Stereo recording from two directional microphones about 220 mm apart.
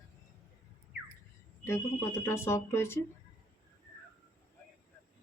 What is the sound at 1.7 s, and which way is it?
Speech, 10° left (ahead or behind).